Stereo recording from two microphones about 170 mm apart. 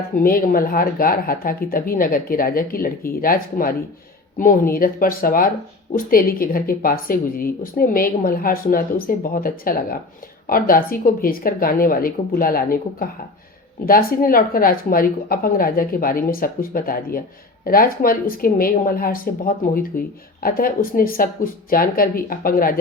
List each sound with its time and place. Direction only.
0.2 s a woman's voice: 60° left (ahead or behind)